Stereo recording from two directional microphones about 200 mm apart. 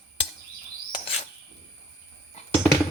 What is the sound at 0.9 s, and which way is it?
Bird, 30° left (ahead or behind).